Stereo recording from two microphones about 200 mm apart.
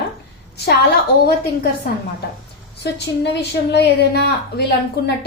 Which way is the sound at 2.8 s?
60° left (ahead or behind).